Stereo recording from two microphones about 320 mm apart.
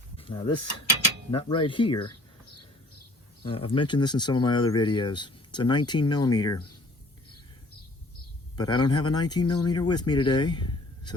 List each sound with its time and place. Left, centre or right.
0.2 s speech: centre
3.4 s speech: centre
8.8 s speech: centre